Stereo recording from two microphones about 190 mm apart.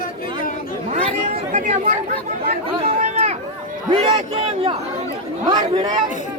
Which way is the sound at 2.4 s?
30° right (ahead or behind).